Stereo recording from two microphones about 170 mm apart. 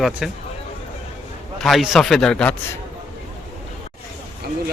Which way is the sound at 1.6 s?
Centre (ahead or behind).